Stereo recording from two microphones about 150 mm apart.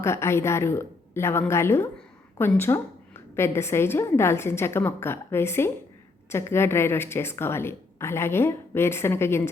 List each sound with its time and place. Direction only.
0.0 s a woman's voice: 15° left (ahead or behind)